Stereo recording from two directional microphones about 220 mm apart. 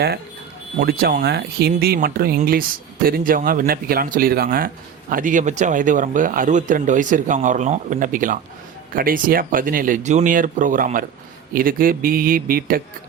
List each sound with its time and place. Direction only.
0.8 s speech: 45° right (ahead or behind)